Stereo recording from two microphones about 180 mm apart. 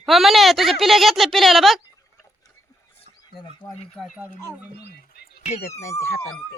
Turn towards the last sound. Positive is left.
turn(degrees=15)  # may be behind; listen again after turning